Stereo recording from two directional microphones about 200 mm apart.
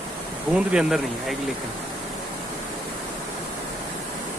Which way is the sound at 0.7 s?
5° right (ahead or behind).